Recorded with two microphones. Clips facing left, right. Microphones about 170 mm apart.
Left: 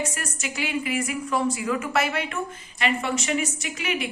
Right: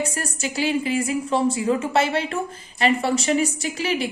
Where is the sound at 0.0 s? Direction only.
30° right (ahead or behind).